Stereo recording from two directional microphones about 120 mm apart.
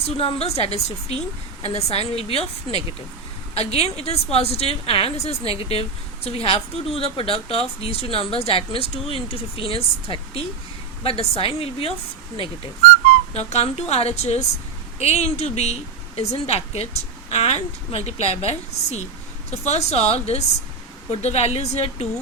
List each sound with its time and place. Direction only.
0.0 s a woman's voice: 55° left (ahead or behind)
13.3 s a woman's voice: 65° left (ahead or behind)